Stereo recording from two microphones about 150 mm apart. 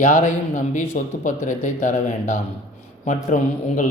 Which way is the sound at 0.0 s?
55° left (ahead or behind).